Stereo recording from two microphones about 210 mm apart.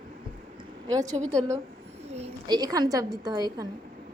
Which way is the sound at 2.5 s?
20° right (ahead or behind).